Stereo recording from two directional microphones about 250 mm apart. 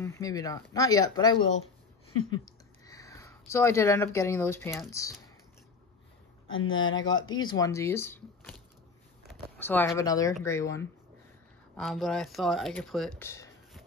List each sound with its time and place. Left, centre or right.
0.0 s speech: centre
2.3 s speech: centre
6.5 s speech: left
7.2 s speech: centre
11.7 s speech: centre